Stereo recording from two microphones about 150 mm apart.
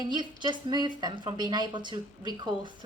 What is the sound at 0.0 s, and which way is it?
A woman's voice, 30° right (ahead or behind).